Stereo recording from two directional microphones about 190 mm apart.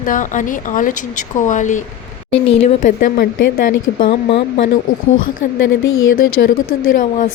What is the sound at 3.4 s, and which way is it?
Speech, 55° left (ahead or behind).